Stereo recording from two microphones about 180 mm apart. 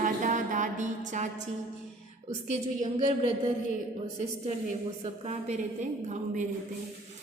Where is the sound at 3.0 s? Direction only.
40° right (ahead or behind).